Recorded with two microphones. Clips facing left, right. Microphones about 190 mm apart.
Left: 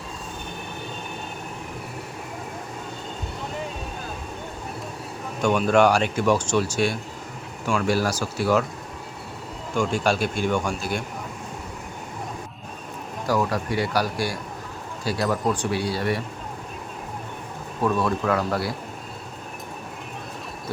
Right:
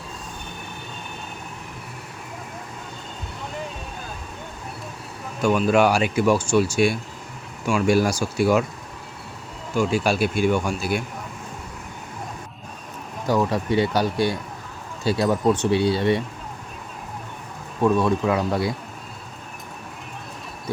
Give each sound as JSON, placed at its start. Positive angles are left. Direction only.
{"t": 5.4, "sound": "speech", "side_deg": -5}
{"t": 9.7, "sound": "speech", "side_deg": -5}
{"t": 13.2, "sound": "speech", "side_deg": -25}
{"t": 17.9, "sound": "speech", "side_deg": 0}
{"t": 18.3, "sound": "speech", "side_deg": -15}